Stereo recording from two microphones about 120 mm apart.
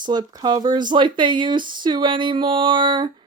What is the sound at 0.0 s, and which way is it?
Speech, 40° right (ahead or behind).